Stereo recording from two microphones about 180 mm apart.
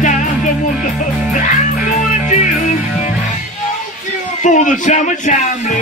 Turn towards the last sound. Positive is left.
turn(degrees=45)  # may be behind; listen again after turning